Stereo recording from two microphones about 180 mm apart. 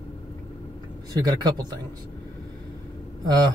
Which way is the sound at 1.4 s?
25° right (ahead or behind).